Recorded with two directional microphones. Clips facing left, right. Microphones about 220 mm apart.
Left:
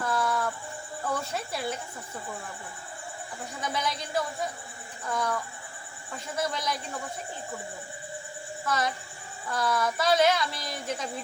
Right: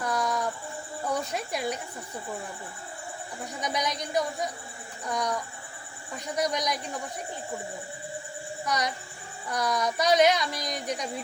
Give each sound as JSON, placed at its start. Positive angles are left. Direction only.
{"t": 0.0, "sound": "a sound", "side_deg": -20}
{"t": 1.0, "sound": "speech", "side_deg": -15}
{"t": 3.6, "sound": "speech", "side_deg": -15}
{"t": 8.6, "sound": "speech", "side_deg": -15}